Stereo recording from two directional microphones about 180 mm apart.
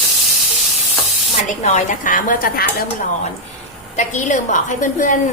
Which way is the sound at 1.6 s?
45° left (ahead or behind).